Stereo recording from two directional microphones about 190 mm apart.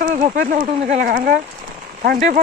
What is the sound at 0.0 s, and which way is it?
Speech, 45° right (ahead or behind).